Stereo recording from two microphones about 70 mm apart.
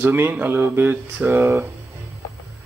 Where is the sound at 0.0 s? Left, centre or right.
Right.